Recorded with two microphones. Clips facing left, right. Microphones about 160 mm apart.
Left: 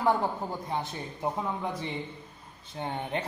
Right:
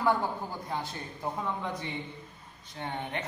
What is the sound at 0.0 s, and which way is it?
Speech, 25° left (ahead or behind).